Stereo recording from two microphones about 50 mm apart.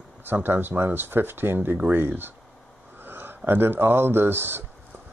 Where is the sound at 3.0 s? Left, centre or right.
Right.